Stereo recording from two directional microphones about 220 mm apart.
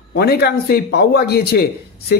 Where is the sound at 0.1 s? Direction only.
45° left (ahead or behind).